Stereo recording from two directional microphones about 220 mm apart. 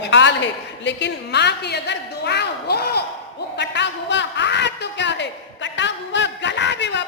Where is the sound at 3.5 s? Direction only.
50° left (ahead or behind).